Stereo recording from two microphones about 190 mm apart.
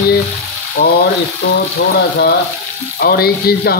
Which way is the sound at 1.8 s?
70° left (ahead or behind).